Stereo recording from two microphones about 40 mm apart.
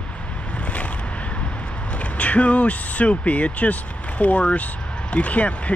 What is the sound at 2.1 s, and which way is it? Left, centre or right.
Speech, left.